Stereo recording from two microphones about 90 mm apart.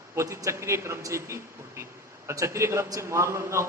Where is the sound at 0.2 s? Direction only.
35° right (ahead or behind).